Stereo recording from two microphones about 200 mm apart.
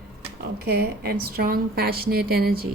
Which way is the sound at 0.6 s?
50° right (ahead or behind).